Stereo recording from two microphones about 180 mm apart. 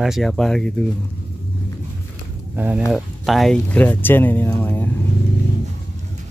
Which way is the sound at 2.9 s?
Centre (ahead or behind).